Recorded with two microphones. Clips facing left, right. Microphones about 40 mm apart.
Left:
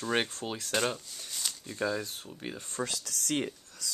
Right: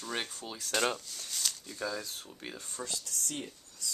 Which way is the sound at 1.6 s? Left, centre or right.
Left.